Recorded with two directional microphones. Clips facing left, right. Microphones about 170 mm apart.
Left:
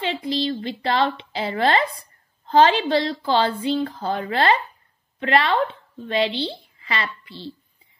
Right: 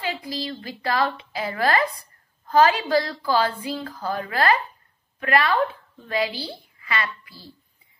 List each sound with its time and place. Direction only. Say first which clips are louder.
0.0 s a woman's voice: left 5 dB; 25° left (ahead or behind)